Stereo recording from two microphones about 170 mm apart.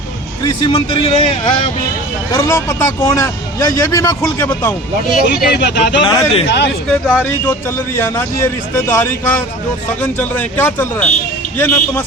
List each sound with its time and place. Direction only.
0.4 s a man's voice: 25° left (ahead or behind)
2.3 s a man's voice: 15° left (ahead or behind)
5.3 s speech: 85° left
6.0 s a man's voice: 30° left (ahead or behind)
6.8 s a man's voice: 5° left (ahead or behind)